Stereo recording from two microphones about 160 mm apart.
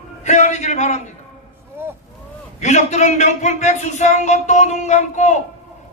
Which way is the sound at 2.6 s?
45° left (ahead or behind).